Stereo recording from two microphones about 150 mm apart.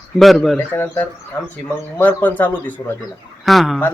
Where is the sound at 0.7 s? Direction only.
15° left (ahead or behind).